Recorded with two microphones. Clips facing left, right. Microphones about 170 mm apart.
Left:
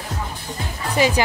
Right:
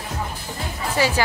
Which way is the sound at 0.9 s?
20° left (ahead or behind).